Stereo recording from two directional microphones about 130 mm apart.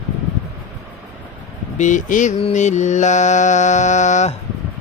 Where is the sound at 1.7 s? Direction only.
70° left (ahead or behind).